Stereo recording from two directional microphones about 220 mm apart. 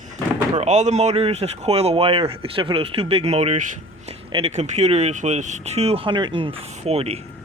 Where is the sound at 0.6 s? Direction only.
30° right (ahead or behind).